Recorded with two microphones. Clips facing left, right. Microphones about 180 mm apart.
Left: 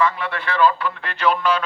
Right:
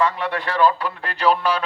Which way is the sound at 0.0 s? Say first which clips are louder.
Even; 35° right (ahead or behind).